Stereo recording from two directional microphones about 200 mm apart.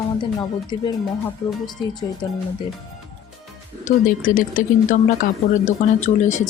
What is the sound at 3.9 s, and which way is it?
A woman's voice, 40° left (ahead or behind).